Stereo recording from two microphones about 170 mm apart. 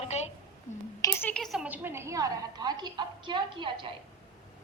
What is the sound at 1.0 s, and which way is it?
A woman's voice, 15° left (ahead or behind).